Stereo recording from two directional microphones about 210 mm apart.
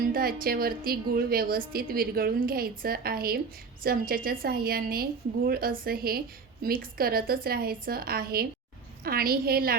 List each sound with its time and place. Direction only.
0.1 s a woman's voice: 45° right (ahead or behind)